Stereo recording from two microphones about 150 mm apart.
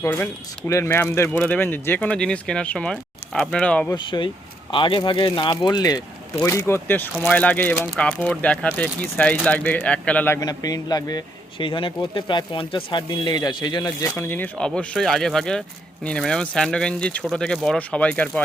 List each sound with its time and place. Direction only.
0.0 s speech: 15° left (ahead or behind)
3.9 s speech: 30° left (ahead or behind); by 10.4 s 10° left (ahead or behind)
10.4 s speech: 25° left (ahead or behind); by 18.4 s 10° left (ahead or behind)